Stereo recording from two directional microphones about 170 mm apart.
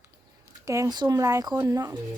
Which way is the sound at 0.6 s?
20° right (ahead or behind).